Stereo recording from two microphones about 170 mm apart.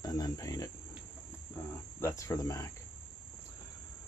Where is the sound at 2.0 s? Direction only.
15° left (ahead or behind).